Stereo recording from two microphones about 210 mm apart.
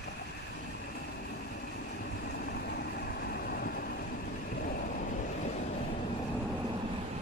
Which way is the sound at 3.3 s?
45° left (ahead or behind).